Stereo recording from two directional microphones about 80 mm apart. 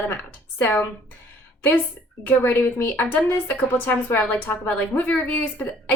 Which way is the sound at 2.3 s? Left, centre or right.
Left.